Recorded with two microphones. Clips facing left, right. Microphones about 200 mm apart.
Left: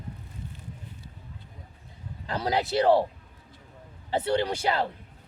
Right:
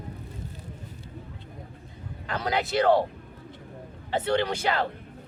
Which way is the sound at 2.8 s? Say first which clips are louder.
Even; 10° left (ahead or behind).